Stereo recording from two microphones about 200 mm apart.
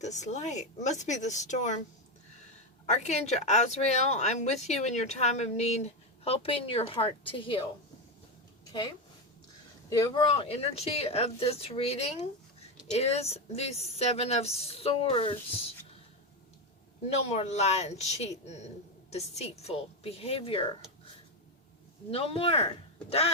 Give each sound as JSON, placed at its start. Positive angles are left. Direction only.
{"t": 0.0, "sound": "speech", "side_deg": 35}
{"t": 2.8, "sound": "speech", "side_deg": 35}
{"t": 9.9, "sound": "speech", "side_deg": 20}
{"t": 17.2, "sound": "speech", "side_deg": 35}
{"t": 22.1, "sound": "speech", "side_deg": 30}